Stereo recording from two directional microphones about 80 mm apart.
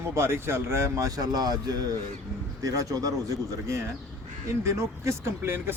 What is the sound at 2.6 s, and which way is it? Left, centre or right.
Speech, right.